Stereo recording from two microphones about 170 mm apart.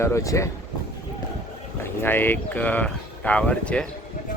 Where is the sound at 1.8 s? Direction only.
15° left (ahead or behind).